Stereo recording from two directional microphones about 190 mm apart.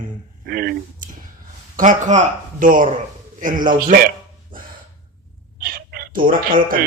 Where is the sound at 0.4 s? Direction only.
55° right (ahead or behind).